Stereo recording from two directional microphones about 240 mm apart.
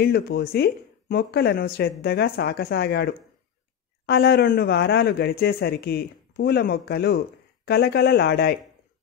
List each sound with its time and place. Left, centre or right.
0.0 s speech: left